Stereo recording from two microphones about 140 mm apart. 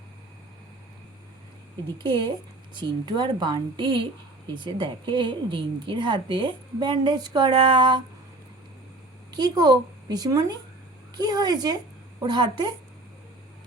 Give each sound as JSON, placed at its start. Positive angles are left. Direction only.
{"t": 2.0, "sound": "a woman's voice", "side_deg": -35}
{"t": 9.3, "sound": "a woman's voice", "side_deg": -30}